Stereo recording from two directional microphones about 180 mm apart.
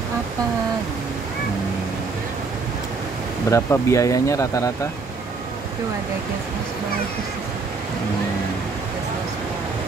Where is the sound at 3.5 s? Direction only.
15° left (ahead or behind).